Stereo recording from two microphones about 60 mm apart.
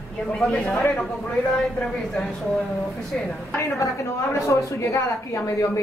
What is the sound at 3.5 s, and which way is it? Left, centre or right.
A woman's voice, left.